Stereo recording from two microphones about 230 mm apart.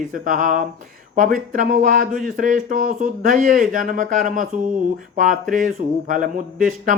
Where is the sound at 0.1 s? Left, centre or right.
Right.